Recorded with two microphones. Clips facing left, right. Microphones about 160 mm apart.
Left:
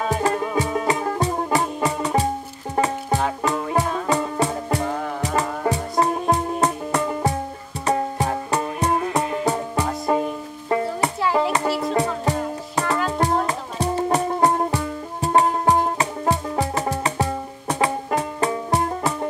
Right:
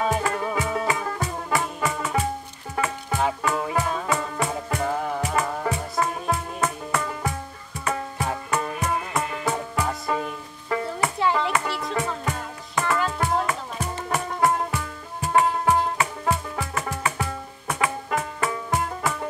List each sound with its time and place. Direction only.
0.2 s music: 35° left (ahead or behind)